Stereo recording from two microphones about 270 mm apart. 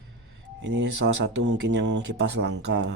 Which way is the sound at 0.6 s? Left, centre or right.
Right.